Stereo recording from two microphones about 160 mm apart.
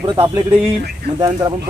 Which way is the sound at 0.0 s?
20° right (ahead or behind).